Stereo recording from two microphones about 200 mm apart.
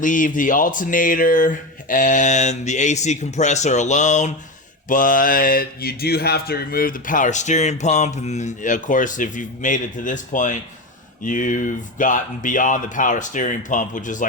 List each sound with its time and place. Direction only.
0.0 s speech: 40° left (ahead or behind)